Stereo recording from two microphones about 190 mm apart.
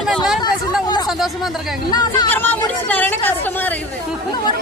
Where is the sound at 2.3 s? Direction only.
10° left (ahead or behind).